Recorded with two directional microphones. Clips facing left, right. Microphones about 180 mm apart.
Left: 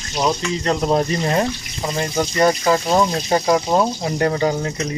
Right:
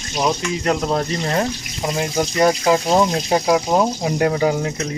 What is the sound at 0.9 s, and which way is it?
Speech, 10° left (ahead or behind).